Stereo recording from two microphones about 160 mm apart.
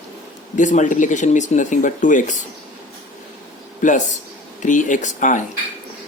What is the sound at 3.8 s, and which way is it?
Speech, 55° left (ahead or behind).